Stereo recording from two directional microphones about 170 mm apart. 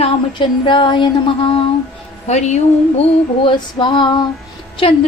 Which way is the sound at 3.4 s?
25° left (ahead or behind).